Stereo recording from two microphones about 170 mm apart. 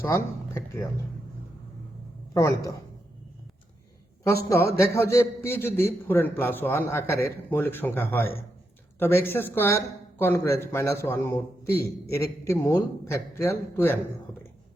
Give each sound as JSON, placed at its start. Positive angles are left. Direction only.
{"t": 0.0, "sound": "speech", "side_deg": 15}
{"t": 2.3, "sound": "speech", "side_deg": 20}
{"t": 4.4, "sound": "a man's voice", "side_deg": 15}